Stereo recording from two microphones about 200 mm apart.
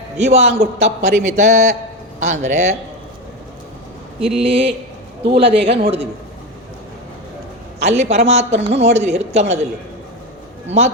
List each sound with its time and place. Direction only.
0.2 s a man's voice: 35° right (ahead or behind)
4.4 s a man's voice: 30° right (ahead or behind)
7.9 s a man's voice: 35° right (ahead or behind)
10.7 s a man's voice: 35° right (ahead or behind)